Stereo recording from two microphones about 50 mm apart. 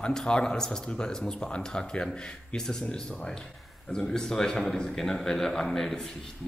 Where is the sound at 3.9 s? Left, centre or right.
Centre.